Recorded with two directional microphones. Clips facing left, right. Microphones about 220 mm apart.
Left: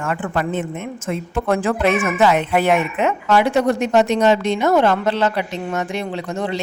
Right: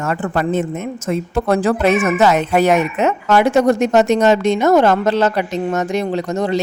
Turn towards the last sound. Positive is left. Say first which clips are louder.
# right 5 dB
turn(degrees=-40)  # may be behind; listen again after turning